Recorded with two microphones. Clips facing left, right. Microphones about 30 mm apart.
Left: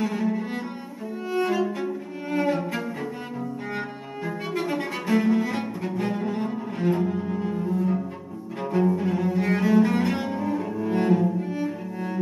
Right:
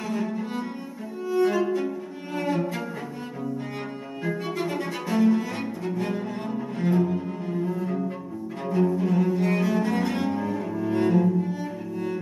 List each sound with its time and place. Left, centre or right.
0.0 s cello: centre
1.4 s music: centre
4.2 s music: centre
4.9 s cello: centre
7.5 s cello: centre
8.5 s cello: centre
10.3 s cello: centre